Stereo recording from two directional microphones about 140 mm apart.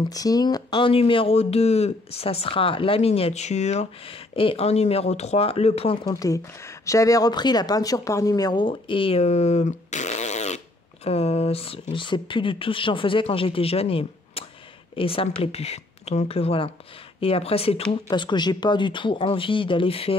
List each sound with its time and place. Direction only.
0.1 s speech: 25° left (ahead or behind); by 5.9 s 45° left (ahead or behind)
6.0 s speech: 25° left (ahead or behind); by 17.8 s 45° left (ahead or behind)
18.1 s speech: 35° left (ahead or behind)